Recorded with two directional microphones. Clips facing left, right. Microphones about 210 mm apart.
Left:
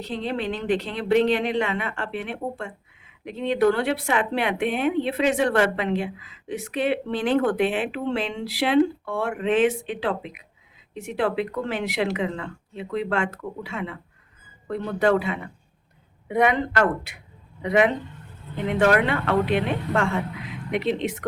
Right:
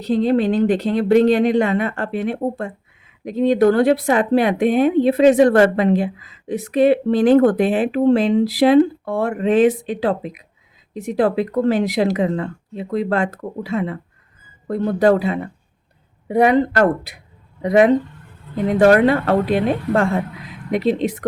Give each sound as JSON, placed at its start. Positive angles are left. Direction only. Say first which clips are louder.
{"t": 0.0, "sound": "speech", "louder": "right 11 dB", "side_deg": -40}